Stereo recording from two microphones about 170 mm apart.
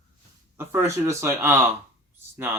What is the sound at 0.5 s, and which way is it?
Speech, 15° right (ahead or behind).